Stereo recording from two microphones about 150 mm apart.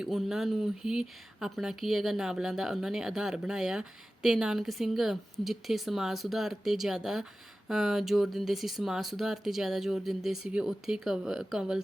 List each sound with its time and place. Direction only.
0.0 s speech: centre (ahead or behind)